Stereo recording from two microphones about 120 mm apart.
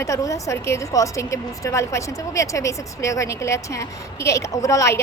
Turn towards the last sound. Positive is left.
turn(degrees=25)  # may be behind; listen again after turning